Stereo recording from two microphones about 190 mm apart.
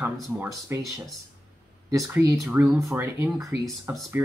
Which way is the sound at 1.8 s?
15° right (ahead or behind).